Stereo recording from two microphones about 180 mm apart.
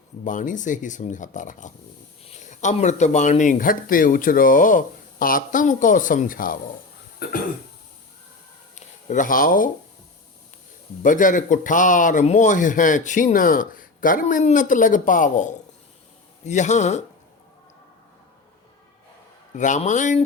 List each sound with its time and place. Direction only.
0.3 s speech: 45° left (ahead or behind)
7.2 s cough: 60° left (ahead or behind)
8.7 s a sound: 45° left (ahead or behind)
11.0 s speech: 45° left (ahead or behind)
19.5 s speech: 45° left (ahead or behind)